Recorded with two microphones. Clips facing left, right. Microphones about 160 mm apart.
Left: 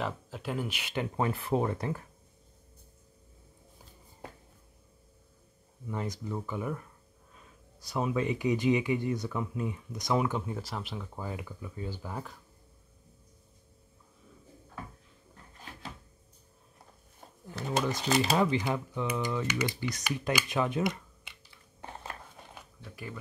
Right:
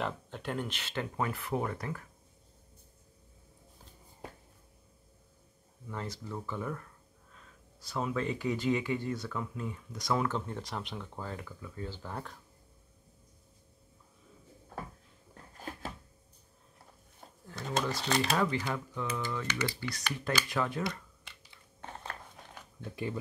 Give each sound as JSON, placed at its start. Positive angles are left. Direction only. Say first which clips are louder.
{"t": 0.0, "sound": "speech", "louder": "left 1 dB", "side_deg": 5}
{"t": 1.1, "sound": "speech", "louder": "left 5 dB", "side_deg": 25}
{"t": 5.9, "sound": "speech", "louder": "left 4 dB", "side_deg": 15}
{"t": 15.7, "sound": "drawer open or close", "louder": "right 7 dB", "side_deg": -45}
{"t": 17.6, "sound": "speech", "louder": "left 2 dB", "side_deg": 10}
{"t": 18.4, "sound": "speech", "louder": "left 3 dB", "side_deg": 20}
{"t": 21.8, "sound": "a sound", "louder": "left 1 dB", "side_deg": 10}
{"t": 22.8, "sound": "speech", "louder": "right 7 dB", "side_deg": -25}